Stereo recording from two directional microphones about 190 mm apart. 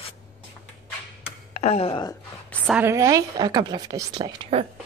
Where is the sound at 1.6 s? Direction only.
35° left (ahead or behind).